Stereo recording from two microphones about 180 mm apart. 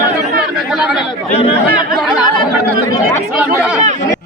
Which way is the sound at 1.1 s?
30° left (ahead or behind).